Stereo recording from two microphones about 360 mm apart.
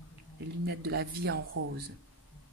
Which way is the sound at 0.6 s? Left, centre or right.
Right.